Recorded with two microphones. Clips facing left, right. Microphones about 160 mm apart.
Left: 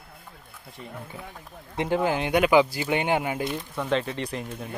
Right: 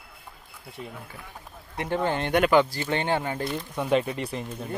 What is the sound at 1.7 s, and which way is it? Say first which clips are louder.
Speech: left 3 dB; 20° left (ahead or behind).